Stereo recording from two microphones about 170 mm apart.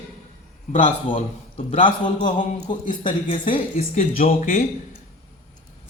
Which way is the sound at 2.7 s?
30° left (ahead or behind).